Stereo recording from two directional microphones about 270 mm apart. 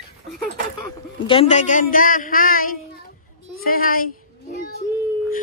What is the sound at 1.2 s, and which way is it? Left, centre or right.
Speech, left.